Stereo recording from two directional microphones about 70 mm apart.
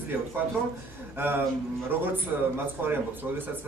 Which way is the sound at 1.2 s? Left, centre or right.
Right.